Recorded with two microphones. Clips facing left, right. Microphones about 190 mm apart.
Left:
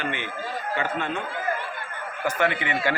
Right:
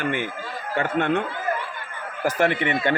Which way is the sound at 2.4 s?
25° right (ahead or behind).